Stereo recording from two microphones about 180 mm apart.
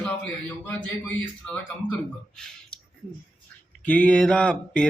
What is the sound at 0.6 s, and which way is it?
Speech, 10° left (ahead or behind).